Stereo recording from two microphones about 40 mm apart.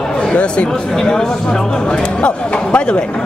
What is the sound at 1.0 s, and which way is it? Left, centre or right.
Speech, centre.